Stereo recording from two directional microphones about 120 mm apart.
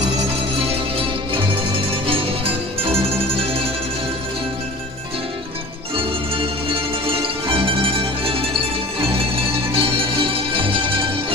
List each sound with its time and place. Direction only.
2.0 s music: 50° right (ahead or behind)
6.0 s music: 50° right (ahead or behind)